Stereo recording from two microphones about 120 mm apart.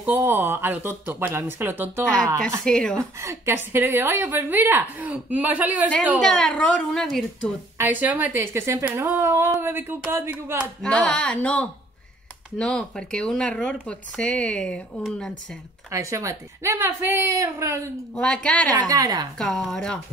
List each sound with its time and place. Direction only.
0.0 s a woman's voice: 15° right (ahead or behind)
2.6 s speech: 5° left (ahead or behind)
3.0 s a woman's voice: 25° right (ahead or behind)
6.2 s a child's voice: 5° left (ahead or behind)
7.7 s a woman's voice: 15° right (ahead or behind)
10.8 s a child's voice: 5° left (ahead or behind)
15.9 s a woman's voice: 25° right (ahead or behind)
18.1 s speech: 5° left (ahead or behind)
18.7 s a woman's voice: 30° right (ahead or behind)
19.3 s a child's voice: 5° left (ahead or behind)